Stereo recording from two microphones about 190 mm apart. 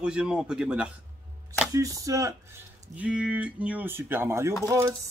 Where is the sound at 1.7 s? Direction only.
15° right (ahead or behind).